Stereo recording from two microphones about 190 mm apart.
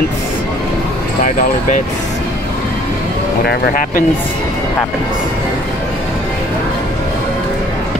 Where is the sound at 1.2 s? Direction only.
40° left (ahead or behind).